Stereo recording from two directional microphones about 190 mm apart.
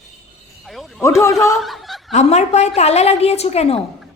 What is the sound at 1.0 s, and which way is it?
Speech, 15° left (ahead or behind).